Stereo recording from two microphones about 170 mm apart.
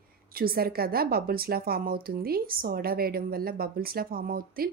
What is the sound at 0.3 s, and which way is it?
Speech, 60° right (ahead or behind).